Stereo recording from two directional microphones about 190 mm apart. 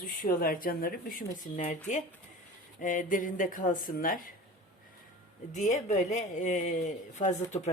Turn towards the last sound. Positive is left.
turn(degrees=35)  # may be behind; listen again after turning